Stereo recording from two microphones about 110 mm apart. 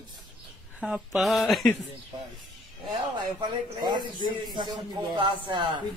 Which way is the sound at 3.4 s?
45° right (ahead or behind).